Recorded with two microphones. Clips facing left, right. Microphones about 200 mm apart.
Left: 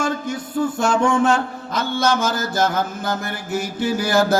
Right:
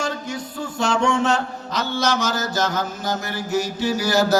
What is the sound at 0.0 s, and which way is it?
Music, 50° left (ahead or behind).